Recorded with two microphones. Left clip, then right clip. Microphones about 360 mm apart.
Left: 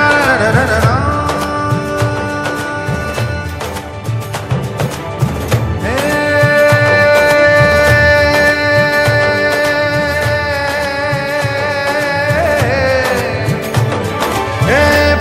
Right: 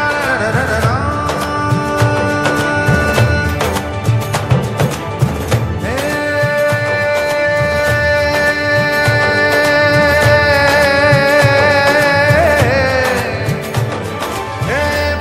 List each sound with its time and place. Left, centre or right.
0.0 s music: left
5.9 s music: left; by 13.2 s centre
14.7 s music: left